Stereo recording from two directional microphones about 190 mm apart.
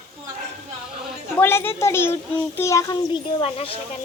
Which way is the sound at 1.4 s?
10° left (ahead or behind).